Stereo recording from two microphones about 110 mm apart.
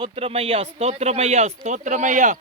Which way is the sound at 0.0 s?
60° right (ahead or behind).